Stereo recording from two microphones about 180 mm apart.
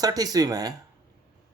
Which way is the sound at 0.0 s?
20° right (ahead or behind).